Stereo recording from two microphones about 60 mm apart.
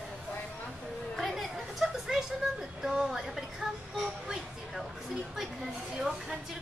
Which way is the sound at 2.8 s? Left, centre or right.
Centre.